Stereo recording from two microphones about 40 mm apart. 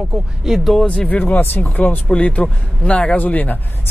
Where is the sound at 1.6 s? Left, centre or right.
Left.